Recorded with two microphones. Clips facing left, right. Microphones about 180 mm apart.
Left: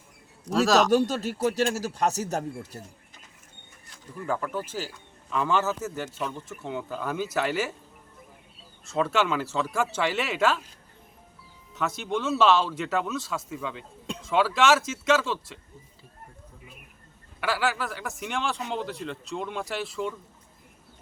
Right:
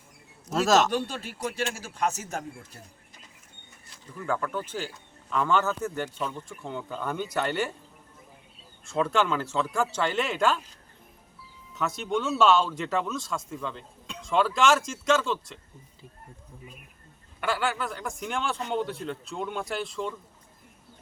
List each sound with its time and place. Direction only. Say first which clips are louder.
0.5 s a man's voice: left 1 dB; centre (ahead or behind)
0.9 s a man's voice: left 7 dB; 40° left (ahead or behind)
4.2 s a man's voice: even; 10° left (ahead or behind)
8.9 s a man's voice: even; centre (ahead or behind)
11.8 s a man's voice: even; centre (ahead or behind)
17.4 s a man's voice: left 1 dB; 5° left (ahead or behind)